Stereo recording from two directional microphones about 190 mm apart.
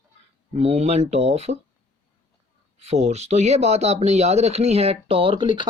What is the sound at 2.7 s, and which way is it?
Speech, 35° right (ahead or behind).